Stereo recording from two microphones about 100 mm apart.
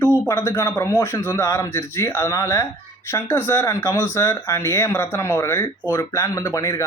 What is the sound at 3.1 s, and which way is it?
Speech, 25° left (ahead or behind).